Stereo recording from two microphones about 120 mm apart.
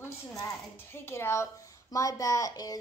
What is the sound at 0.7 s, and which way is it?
A woman's voice, 20° left (ahead or behind).